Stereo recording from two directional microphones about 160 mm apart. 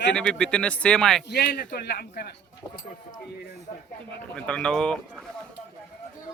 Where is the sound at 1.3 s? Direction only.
90° left.